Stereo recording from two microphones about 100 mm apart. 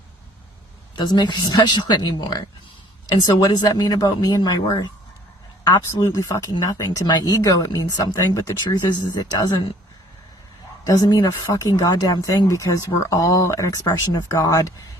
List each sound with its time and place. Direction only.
0.9 s speech: 45° left (ahead or behind)
6.0 s speech: 35° left (ahead or behind)
8.1 s speech: 30° left (ahead or behind)
8.7 s speech: 45° left (ahead or behind)
10.8 s speech: 40° left (ahead or behind)
13.8 s speech: 45° left (ahead or behind)